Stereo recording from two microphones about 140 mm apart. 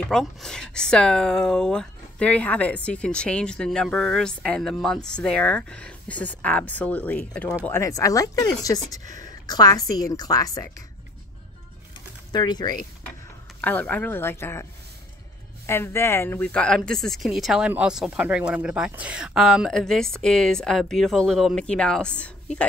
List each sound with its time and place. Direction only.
0.1 s a woman's voice: 5° left (ahead or behind); by 10.7 s 25° left (ahead or behind)
12.3 s speech: 30° left (ahead or behind)
13.6 s a woman's voice: 10° left (ahead or behind)